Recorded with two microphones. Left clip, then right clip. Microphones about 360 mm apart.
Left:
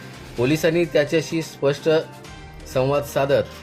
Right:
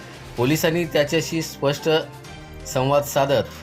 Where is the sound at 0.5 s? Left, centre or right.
Right.